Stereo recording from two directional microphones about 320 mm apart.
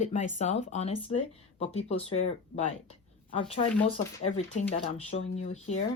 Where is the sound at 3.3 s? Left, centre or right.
Centre.